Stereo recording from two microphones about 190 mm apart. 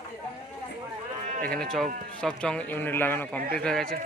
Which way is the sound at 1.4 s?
5° left (ahead or behind).